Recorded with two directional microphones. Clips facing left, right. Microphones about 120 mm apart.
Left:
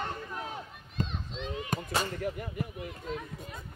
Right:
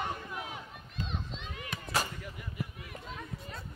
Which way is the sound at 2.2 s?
50° left (ahead or behind).